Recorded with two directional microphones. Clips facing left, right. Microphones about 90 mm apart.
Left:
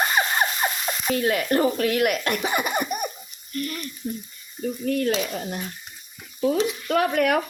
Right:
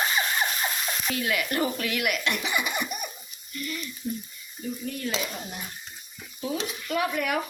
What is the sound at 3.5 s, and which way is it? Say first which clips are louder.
Frying: left 5 dB; 50° left (ahead or behind).